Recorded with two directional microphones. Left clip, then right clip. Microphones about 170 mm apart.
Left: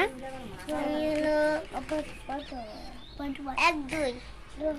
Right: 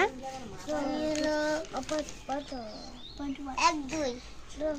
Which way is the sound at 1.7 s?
45° right (ahead or behind).